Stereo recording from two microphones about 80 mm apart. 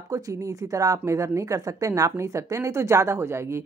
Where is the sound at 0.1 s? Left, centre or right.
Right.